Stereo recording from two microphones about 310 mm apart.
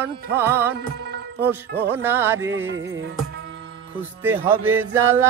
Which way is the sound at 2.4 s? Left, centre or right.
Right.